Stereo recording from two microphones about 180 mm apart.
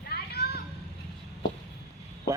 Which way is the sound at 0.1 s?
65° left (ahead or behind).